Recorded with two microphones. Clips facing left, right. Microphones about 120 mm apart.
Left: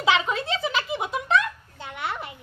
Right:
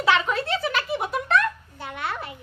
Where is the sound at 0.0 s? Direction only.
15° left (ahead or behind).